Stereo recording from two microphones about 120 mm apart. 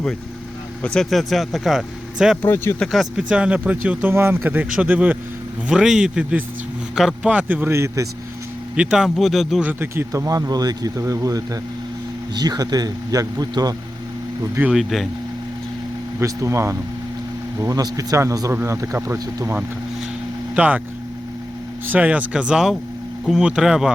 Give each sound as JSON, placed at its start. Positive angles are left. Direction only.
{"t": 0.8, "sound": "speech", "side_deg": 5}
{"t": 2.4, "sound": "speech", "side_deg": 15}
{"t": 2.8, "sound": "speech", "side_deg": 0}
{"t": 8.7, "sound": "speech", "side_deg": -5}
{"t": 9.6, "sound": "speech", "side_deg": -20}
{"t": 14.7, "sound": "speech", "side_deg": 0}
{"t": 16.2, "sound": "speech", "side_deg": -25}
{"t": 20.6, "sound": "speech", "side_deg": -10}
{"t": 21.8, "sound": "speech", "side_deg": -15}